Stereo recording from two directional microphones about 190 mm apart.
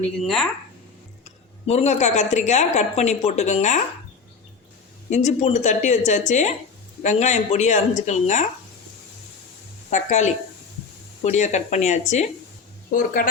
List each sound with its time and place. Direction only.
0.2 s speech: centre (ahead or behind)
1.2 s a woman's voice: 35° left (ahead or behind)
5.0 s a woman's voice: 35° left (ahead or behind)
9.9 s a woman's voice: 40° left (ahead or behind)